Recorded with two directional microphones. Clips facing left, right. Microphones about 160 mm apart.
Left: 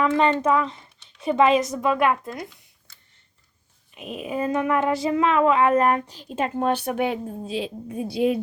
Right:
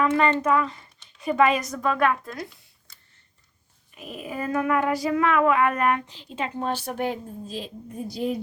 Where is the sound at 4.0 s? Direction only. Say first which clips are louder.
Left 5 dB; 20° left (ahead or behind).